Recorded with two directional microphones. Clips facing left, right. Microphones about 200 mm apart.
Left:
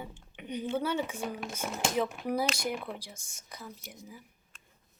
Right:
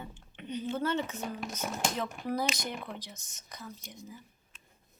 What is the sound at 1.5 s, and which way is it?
Speech, 10° left (ahead or behind).